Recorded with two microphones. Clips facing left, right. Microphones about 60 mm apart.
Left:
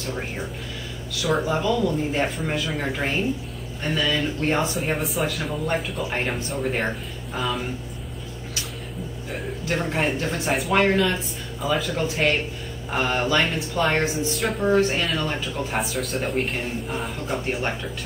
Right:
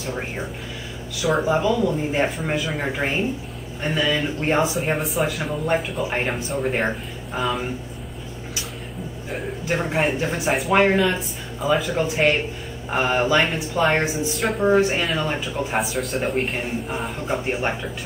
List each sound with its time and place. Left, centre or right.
0.0 s speech: centre
4.7 s speech: centre
9.7 s speech: centre
10.5 s speech: centre
10.8 s speech: centre
14.3 s speech: centre
14.6 s speech: centre
17.2 s speech: centre